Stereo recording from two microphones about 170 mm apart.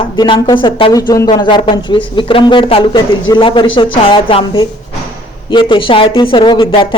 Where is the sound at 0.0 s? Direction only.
25° left (ahead or behind).